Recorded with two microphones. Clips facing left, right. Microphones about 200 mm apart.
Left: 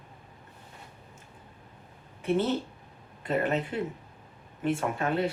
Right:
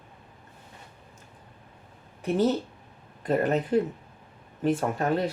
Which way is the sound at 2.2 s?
40° right (ahead or behind).